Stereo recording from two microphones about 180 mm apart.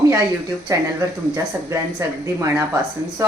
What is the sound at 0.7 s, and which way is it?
Speech, 20° right (ahead or behind).